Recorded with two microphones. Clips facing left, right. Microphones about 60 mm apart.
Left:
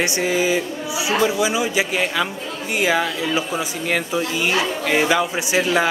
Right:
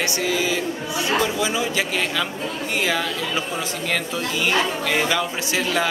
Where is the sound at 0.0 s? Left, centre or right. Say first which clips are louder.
Left 3 dB; left.